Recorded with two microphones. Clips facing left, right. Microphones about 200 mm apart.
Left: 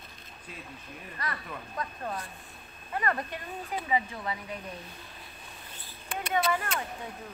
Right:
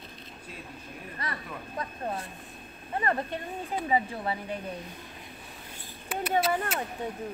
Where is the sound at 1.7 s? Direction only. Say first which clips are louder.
Right 2 dB; 25° right (ahead or behind).